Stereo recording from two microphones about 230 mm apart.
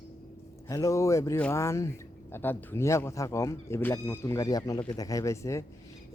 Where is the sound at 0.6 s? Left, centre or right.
Centre.